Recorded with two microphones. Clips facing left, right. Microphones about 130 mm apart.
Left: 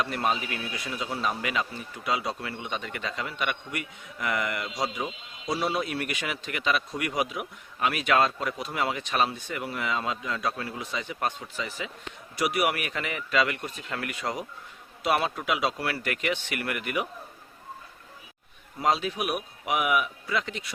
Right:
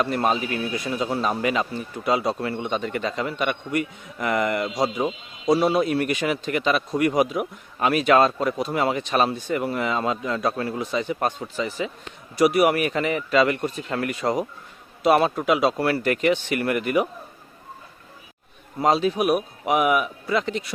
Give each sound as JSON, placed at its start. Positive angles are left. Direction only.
{"t": 0.0, "sound": "a man's voice", "side_deg": -40}
{"t": 18.8, "sound": "a man's voice", "side_deg": -35}